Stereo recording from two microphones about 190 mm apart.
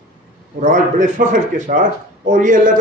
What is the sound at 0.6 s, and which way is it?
A man's voice, 45° right (ahead or behind).